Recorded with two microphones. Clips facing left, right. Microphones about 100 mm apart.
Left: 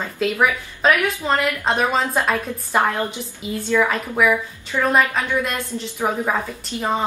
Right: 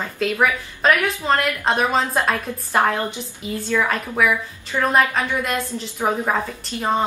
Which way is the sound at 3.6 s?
5° left (ahead or behind).